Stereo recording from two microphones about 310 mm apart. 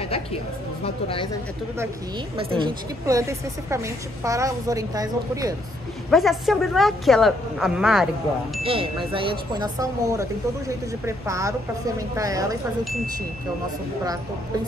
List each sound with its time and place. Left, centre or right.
0.8 s speech: centre
2.3 s a woman's voice: centre
6.0 s speech: centre
8.6 s a woman's voice: centre